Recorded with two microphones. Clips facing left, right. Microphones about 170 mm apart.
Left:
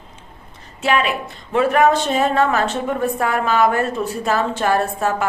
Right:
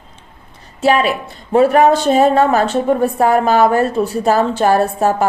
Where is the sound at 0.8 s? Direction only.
35° right (ahead or behind).